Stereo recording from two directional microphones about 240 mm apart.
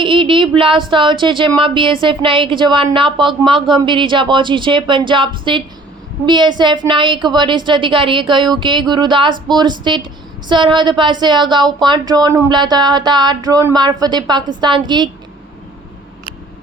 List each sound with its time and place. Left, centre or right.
0.0 s speech: right